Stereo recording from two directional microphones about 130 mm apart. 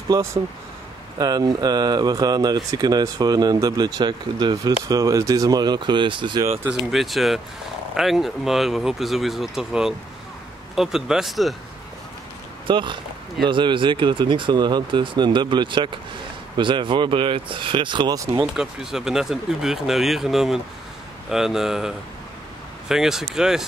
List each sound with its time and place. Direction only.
0.1 s speech: 20° right (ahead or behind); by 6.4 s 40° right (ahead or behind)
6.9 s speech: centre (ahead or behind)
12.6 s speech: 40° right (ahead or behind)
18.4 s speech: 5° right (ahead or behind)